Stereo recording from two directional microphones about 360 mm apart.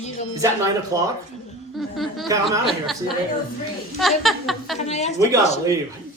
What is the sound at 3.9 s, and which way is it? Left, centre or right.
Speech, centre.